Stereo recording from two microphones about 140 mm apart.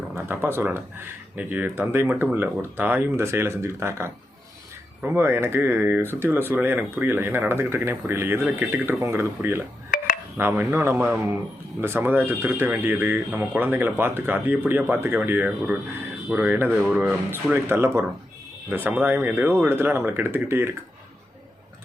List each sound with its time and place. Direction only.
0.2 s speech: 15° right (ahead or behind)
5.1 s speech: 15° right (ahead or behind)
17.3 s speech: 15° right (ahead or behind)